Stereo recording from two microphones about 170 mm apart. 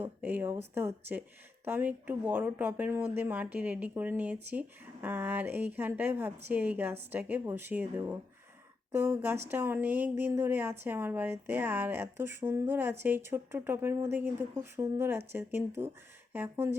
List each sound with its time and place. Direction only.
0.0 s a woman's voice: 10° right (ahead or behind)